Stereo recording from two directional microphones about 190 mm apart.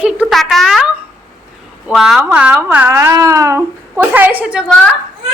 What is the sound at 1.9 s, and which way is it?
A woman's voice, 5° right (ahead or behind).